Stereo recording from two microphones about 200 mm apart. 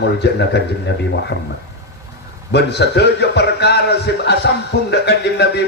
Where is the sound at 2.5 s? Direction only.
55° left (ahead or behind).